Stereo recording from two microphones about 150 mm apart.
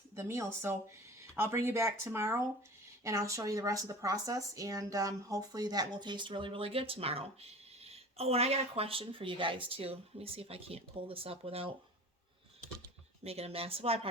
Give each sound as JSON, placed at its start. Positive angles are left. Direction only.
{"t": 0.2, "sound": "speech", "side_deg": -20}
{"t": 13.2, "sound": "speech", "side_deg": -45}